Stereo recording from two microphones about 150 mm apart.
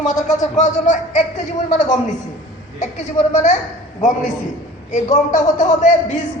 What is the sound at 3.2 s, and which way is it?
Speech, 50° left (ahead or behind).